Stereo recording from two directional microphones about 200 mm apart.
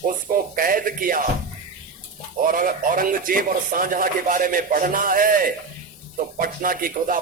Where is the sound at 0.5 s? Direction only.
45° right (ahead or behind).